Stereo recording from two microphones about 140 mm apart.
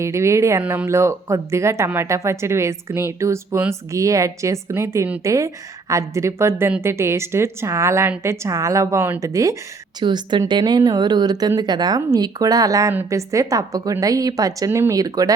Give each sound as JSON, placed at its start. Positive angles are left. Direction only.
{"t": 0.0, "sound": "a woman's voice", "side_deg": -20}
{"t": 0.6, "sound": "speech", "side_deg": -10}
{"t": 0.9, "sound": "a woman's voice", "side_deg": -20}
{"t": 10.0, "sound": "a woman's voice", "side_deg": -35}